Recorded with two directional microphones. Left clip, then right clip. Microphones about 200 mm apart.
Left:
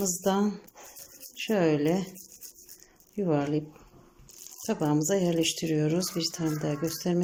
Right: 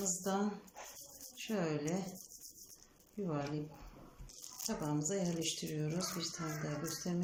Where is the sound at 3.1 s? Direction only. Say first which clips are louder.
Left 13 dB; 45° left (ahead or behind).